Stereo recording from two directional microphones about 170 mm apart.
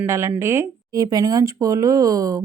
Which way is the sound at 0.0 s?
15° right (ahead or behind).